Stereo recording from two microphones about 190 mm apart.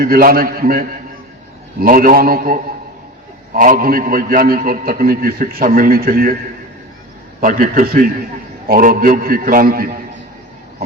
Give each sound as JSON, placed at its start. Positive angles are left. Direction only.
{"t": 0.0, "sound": "a man's voice", "side_deg": -50}
{"t": 7.4, "sound": "a man's voice", "side_deg": -45}